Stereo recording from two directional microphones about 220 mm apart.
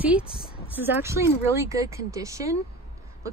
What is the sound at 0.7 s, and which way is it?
Speech, 10° right (ahead or behind).